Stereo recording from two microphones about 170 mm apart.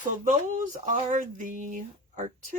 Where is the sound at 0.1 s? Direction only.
50° right (ahead or behind).